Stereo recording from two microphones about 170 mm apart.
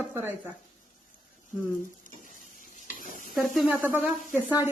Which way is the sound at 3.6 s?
Centre (ahead or behind).